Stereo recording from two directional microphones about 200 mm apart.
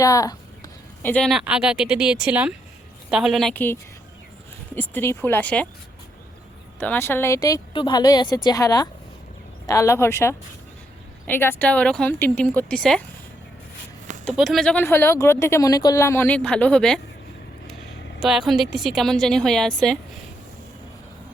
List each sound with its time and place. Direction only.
0.0 s speech: 15° left (ahead or behind)
1.0 s a woman's voice: 5° left (ahead or behind)
6.7 s a woman's voice: 10° left (ahead or behind)
14.3 s speech: centre (ahead or behind)
18.2 s a woman's voice: centre (ahead or behind)